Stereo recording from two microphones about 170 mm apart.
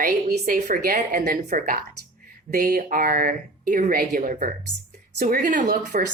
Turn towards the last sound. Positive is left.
turn(degrees=-50)  # may be behind; listen again after turning